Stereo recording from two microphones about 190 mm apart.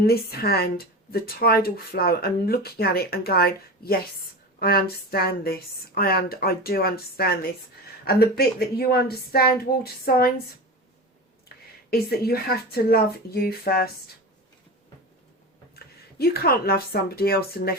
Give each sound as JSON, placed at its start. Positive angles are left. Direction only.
{"t": 0.0, "sound": "a woman's voice", "side_deg": 55}
{"t": 11.4, "sound": "speech", "side_deg": 55}
{"t": 15.7, "sound": "speech", "side_deg": 55}